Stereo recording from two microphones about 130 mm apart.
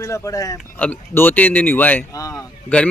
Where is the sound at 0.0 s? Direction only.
25° left (ahead or behind).